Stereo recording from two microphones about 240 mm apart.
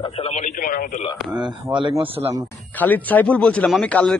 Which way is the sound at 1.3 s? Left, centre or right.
Centre.